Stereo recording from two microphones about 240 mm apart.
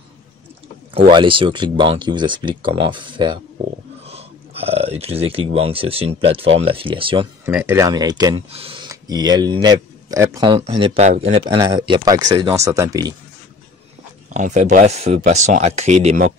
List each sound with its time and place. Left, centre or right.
1.1 s speech: right
4.0 s a sound: right
5.5 s speech: right
7.4 s speech: centre
14.3 s speech: right